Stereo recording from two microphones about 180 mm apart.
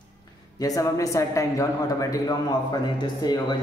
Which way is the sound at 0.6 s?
20° left (ahead or behind).